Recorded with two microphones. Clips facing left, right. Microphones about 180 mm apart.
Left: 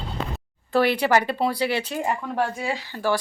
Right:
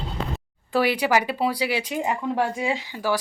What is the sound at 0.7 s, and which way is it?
Speech, 10° right (ahead or behind).